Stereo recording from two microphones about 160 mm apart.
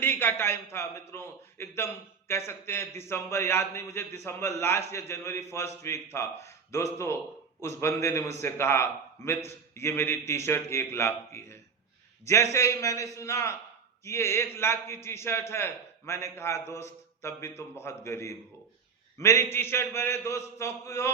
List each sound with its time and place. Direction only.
0.0 s a man's voice: 15° left (ahead or behind)